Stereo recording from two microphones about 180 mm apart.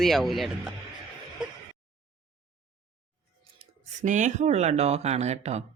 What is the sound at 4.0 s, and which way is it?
Speech, 45° right (ahead or behind).